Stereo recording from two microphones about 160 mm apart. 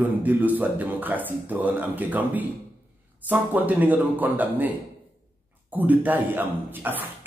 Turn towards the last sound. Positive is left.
turn(degrees=-10)  # may be behind; listen again after turning